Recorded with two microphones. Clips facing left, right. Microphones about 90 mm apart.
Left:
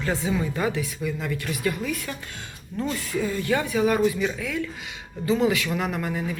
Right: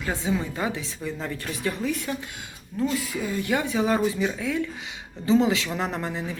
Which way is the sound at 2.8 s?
5° right (ahead or behind).